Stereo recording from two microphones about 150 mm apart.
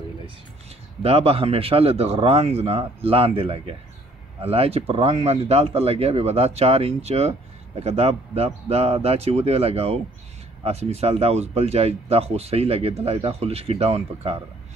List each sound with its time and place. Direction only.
1.0 s speech: 40° right (ahead or behind)